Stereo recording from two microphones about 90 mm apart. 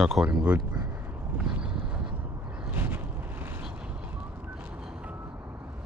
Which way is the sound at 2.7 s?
20° right (ahead or behind).